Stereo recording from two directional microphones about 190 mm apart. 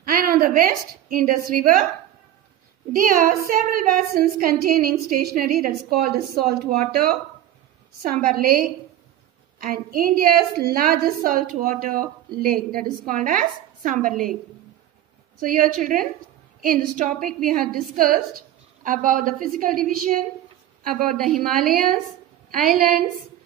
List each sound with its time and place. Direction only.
0.0 s a sound: 50° right (ahead or behind)
0.6 s a woman's voice: 45° right (ahead or behind)
2.9 s a woman's voice: 45° right (ahead or behind)
15.4 s a woman's voice: 45° right (ahead or behind)
21.1 s a woman's voice: centre (ahead or behind)
22.5 s a woman's voice: 45° right (ahead or behind)